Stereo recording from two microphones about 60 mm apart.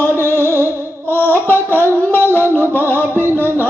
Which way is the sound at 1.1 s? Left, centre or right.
Left.